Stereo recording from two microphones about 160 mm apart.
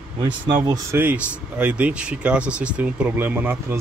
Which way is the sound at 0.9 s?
10° right (ahead or behind).